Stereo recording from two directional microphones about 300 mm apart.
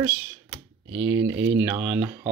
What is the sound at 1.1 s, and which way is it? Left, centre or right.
Speech, right.